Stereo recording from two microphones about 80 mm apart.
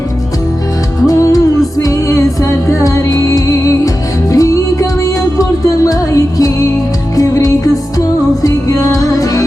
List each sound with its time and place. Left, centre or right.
1.0 s music: left